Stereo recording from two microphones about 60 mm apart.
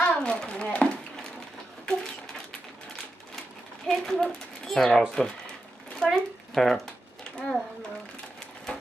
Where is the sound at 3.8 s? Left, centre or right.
Centre.